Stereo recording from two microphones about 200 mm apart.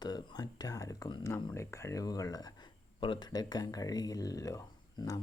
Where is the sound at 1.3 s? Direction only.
15° left (ahead or behind).